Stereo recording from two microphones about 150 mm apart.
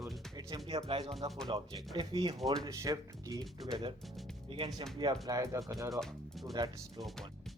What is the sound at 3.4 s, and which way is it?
Speech, centre (ahead or behind).